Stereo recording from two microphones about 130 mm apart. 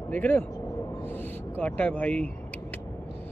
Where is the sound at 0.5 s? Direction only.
25° left (ahead or behind).